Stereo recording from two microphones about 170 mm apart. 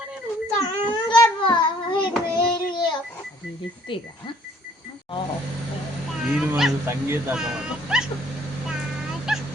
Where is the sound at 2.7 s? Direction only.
25° left (ahead or behind).